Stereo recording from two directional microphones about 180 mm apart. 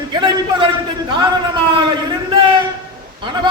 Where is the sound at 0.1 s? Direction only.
25° right (ahead or behind).